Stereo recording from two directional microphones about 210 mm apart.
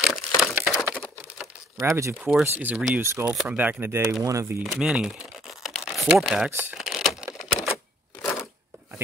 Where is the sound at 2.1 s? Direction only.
5° right (ahead or behind).